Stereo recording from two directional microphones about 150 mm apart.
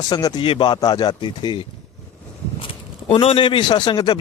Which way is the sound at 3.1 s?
35° left (ahead or behind).